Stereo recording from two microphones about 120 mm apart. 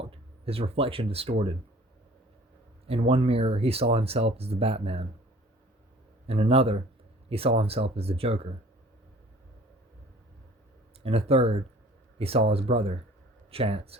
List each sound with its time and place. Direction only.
0.0 s speech: 50° right (ahead or behind)
2.8 s speech: 55° right (ahead or behind)
6.2 s speech: 55° right (ahead or behind)
11.0 s speech: 55° right (ahead or behind)